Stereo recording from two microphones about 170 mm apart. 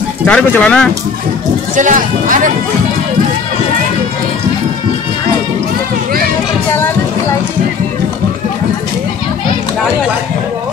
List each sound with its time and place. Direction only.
0.2 s speech: 5° left (ahead or behind)
1.8 s speech: 50° right (ahead or behind)